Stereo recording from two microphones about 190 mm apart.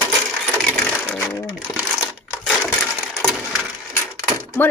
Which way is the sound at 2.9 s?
5° left (ahead or behind).